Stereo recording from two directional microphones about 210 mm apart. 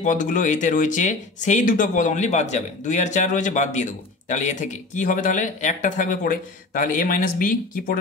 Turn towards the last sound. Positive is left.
turn(degrees=40)  # may be behind; listen again after turning